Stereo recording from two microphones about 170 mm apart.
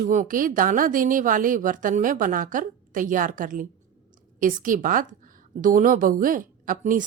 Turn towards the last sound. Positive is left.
turn(degrees=-55)  # may be behind; listen again after turning